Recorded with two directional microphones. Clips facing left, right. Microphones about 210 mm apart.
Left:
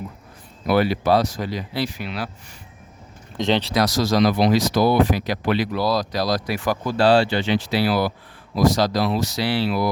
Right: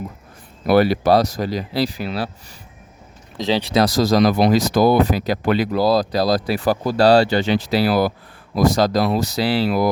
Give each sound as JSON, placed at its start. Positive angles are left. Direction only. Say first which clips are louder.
{"t": 0.7, "sound": "speech", "louder": "right 4 dB", "side_deg": -40}
{"t": 3.3, "sound": "speech", "louder": "even", "side_deg": 0}
{"t": 3.6, "sound": "speech", "louder": "right 4 dB", "side_deg": -20}
{"t": 3.8, "sound": "speech", "louder": "right 3 dB", "side_deg": -40}
{"t": 6.4, "sound": "speech", "louder": "right 4 dB", "side_deg": -30}